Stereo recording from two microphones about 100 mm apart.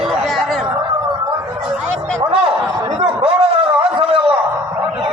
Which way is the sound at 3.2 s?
65° right (ahead or behind).